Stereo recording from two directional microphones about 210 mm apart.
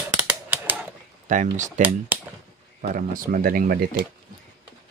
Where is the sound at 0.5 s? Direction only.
10° right (ahead or behind).